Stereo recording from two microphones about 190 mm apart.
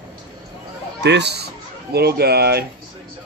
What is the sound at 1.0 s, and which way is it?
Speech, 65° right (ahead or behind).